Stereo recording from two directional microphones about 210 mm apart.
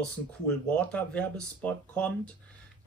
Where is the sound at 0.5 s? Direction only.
5° left (ahead or behind).